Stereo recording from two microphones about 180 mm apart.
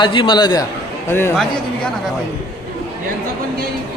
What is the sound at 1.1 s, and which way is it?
Speech, 10° left (ahead or behind).